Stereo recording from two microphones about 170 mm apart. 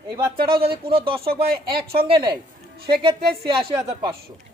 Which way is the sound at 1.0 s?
30° right (ahead or behind).